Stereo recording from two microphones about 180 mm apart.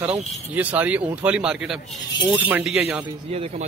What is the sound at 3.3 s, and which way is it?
Speech, 35° right (ahead or behind).